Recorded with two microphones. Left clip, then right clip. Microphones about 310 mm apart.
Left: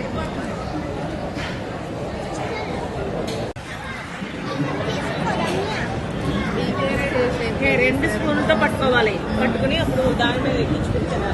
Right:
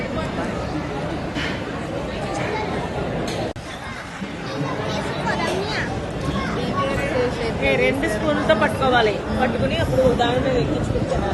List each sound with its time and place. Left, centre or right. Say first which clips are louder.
7.4 s speech: even; right